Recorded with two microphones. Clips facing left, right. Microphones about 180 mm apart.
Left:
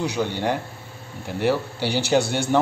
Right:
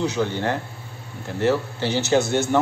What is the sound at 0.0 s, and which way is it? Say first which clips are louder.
A man's voice: right 1 dB; 15° left (ahead or behind).